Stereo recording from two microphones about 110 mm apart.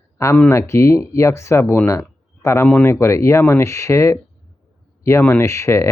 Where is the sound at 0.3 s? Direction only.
20° left (ahead or behind).